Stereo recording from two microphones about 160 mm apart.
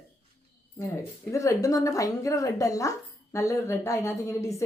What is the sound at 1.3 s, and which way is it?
A woman's voice, 20° left (ahead or behind).